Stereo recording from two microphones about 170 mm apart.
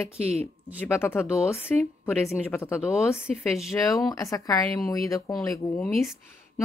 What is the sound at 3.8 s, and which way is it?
Speech, 20° left (ahead or behind).